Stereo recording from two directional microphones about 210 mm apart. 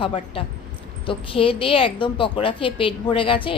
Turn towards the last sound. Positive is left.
turn(degrees=25)  # may be behind; listen again after turning